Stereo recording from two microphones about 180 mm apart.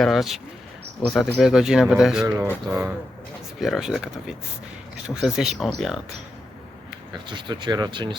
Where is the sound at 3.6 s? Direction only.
Centre (ahead or behind).